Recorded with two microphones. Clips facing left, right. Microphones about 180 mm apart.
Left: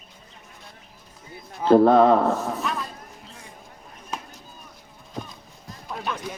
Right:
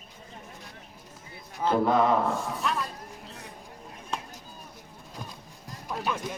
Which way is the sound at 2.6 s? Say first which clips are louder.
Left 1 dB; centre (ahead or behind).